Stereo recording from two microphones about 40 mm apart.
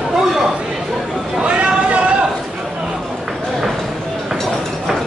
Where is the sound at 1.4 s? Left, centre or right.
Right.